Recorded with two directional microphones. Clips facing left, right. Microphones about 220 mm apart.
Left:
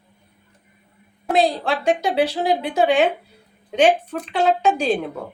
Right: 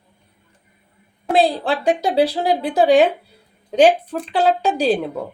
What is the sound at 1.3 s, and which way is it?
A woman's voice, 35° right (ahead or behind).